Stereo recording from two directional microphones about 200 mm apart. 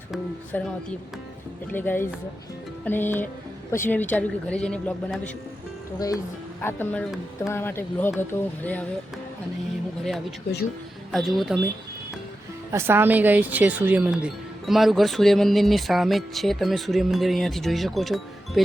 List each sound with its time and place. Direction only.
0.1 s speech: 5° left (ahead or behind)
6.6 s speech: 10° left (ahead or behind)
11.1 s speech: centre (ahead or behind)
12.7 s speech: 10° right (ahead or behind)